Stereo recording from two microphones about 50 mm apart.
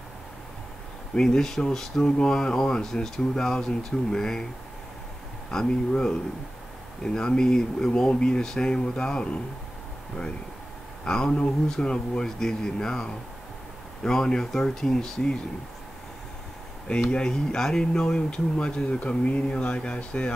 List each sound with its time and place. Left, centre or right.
1.1 s speech: centre
5.5 s speech: centre
11.1 s speech: centre
17.1 s speech: centre